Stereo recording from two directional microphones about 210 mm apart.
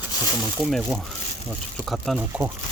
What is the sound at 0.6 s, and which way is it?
Speech, centre (ahead or behind).